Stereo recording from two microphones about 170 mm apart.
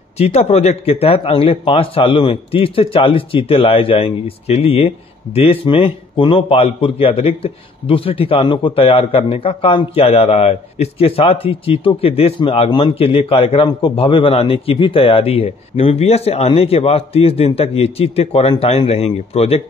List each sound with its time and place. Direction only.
0.2 s a man's voice: 40° left (ahead or behind)